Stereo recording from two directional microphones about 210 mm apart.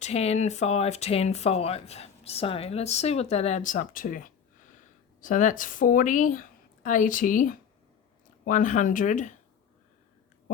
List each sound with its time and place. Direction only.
0.0 s speech: 30° left (ahead or behind)